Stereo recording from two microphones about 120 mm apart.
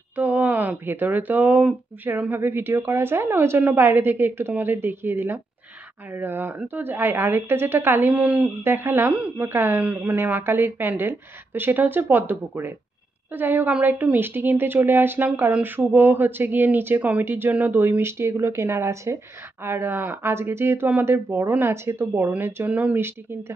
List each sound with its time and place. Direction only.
0.1 s a woman's voice: 15° right (ahead or behind)